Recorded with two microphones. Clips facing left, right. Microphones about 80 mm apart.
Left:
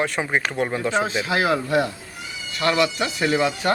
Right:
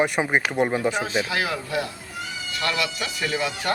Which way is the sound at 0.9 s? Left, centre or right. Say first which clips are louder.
Left 3 dB; left.